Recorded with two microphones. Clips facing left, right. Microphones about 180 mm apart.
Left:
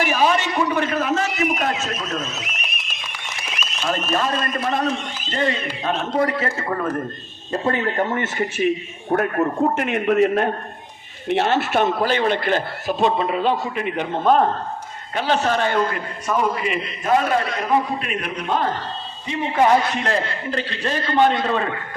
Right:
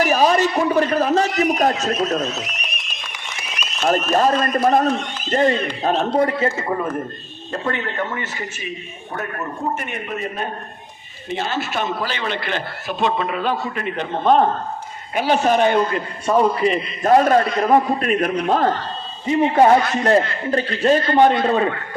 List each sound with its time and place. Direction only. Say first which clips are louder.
0.0 s a sound: right 3 dB; 40° right (ahead or behind)
3.8 s a man's voice: right 6 dB; 40° right (ahead or behind)
6.6 s a man's voice: right 1 dB; 10° right (ahead or behind)
7.6 s a man's voice: left 3 dB; 40° left (ahead or behind); by 9.3 s 55° left (ahead or behind)
9.7 s a man's voice: left 9 dB; 90° left
11.3 s a man's voice: left 5 dB; 65° left (ahead or behind); by 14.4 s 10° left (ahead or behind)
15.1 s a man's voice: right 3 dB; 15° right (ahead or behind); by 21.6 s 35° right (ahead or behind)